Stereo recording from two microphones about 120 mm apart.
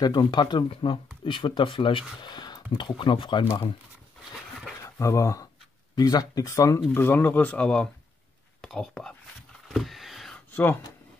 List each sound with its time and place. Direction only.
0.0 s speech: 40° left (ahead or behind)
4.8 s speech: 25° left (ahead or behind)
6.9 s speech: 20° left (ahead or behind)
9.7 s a sound: centre (ahead or behind)
10.5 s speech: 15° left (ahead or behind)